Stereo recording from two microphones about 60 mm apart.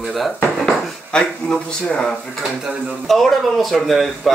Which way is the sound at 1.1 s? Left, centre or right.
Centre.